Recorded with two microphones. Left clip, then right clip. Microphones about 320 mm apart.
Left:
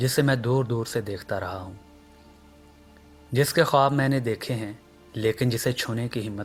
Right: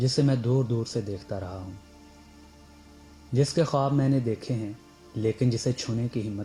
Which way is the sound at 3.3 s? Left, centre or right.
Left.